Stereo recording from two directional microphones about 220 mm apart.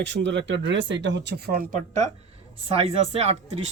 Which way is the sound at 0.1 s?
55° right (ahead or behind).